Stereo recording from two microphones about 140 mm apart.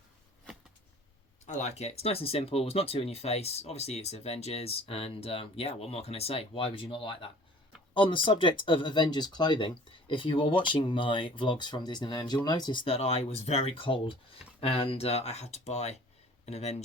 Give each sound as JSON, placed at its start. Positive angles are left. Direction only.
{"t": 1.5, "sound": "speech", "side_deg": 55}